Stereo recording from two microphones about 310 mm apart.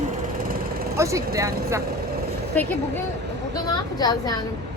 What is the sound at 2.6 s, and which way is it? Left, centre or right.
Speech, centre.